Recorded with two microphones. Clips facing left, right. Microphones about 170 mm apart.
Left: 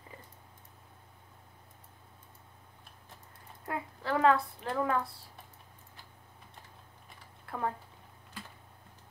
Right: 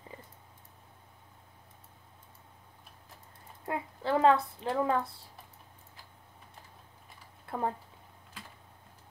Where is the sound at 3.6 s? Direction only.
25° right (ahead or behind).